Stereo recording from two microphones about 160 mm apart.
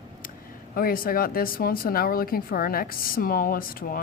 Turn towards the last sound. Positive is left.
turn(degrees=65)  # may be behind; listen again after turning